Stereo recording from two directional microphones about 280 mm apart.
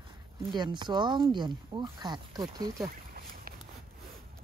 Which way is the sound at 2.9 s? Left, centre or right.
Right.